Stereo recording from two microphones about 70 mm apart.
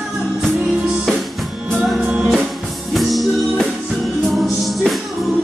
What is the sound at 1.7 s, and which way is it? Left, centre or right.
Music, centre.